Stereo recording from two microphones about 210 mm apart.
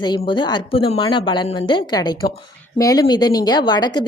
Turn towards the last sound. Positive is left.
turn(degrees=20)  # may be behind; listen again after turning